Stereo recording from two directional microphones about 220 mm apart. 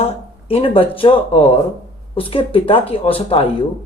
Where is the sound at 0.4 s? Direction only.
25° left (ahead or behind).